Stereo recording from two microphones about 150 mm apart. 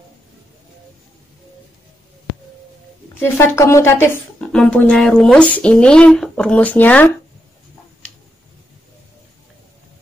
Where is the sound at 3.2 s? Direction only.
15° left (ahead or behind).